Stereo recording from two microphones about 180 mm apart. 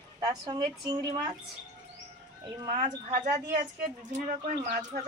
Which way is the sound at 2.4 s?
25° right (ahead or behind).